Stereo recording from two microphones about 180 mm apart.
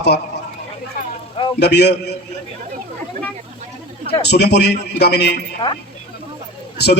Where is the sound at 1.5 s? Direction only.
70° left (ahead or behind).